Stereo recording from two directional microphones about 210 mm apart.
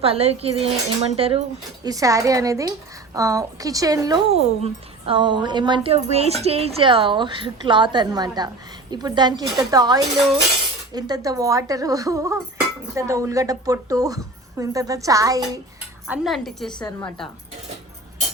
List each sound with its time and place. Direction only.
0.0 s a woman's voice: 30° right (ahead or behind)
4.3 s a woman's voice: 30° right (ahead or behind)
16.0 s speech: 5° right (ahead or behind)